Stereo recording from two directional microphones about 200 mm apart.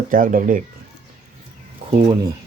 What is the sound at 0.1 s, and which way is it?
Speech, 45° right (ahead or behind).